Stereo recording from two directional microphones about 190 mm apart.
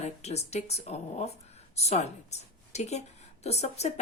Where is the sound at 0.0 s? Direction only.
35° left (ahead or behind).